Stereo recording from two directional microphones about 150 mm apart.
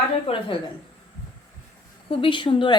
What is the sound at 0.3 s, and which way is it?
Speech, 35° left (ahead or behind).